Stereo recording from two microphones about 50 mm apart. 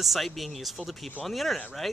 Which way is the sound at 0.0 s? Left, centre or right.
Centre.